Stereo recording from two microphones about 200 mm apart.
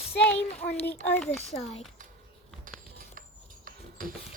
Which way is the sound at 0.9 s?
10° left (ahead or behind).